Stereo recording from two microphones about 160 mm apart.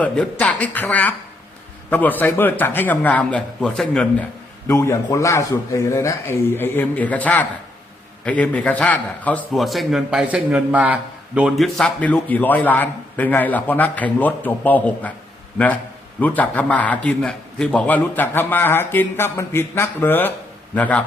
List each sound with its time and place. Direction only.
0.0 s a man's voice: 10° left (ahead or behind)
4.7 s a man's voice: 15° left (ahead or behind)